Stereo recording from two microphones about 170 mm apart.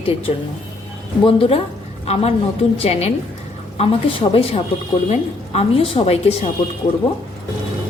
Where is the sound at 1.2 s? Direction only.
35° left (ahead or behind).